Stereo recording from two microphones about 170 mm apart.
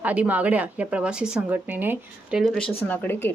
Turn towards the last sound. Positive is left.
turn(degrees=10)  # may be behind; listen again after turning